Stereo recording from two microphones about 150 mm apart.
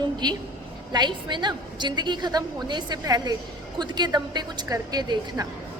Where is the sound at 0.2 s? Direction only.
25° right (ahead or behind).